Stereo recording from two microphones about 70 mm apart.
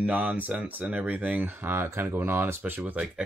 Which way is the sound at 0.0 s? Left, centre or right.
Right.